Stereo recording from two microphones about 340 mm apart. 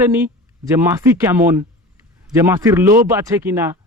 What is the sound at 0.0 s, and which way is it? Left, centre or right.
Speech, centre.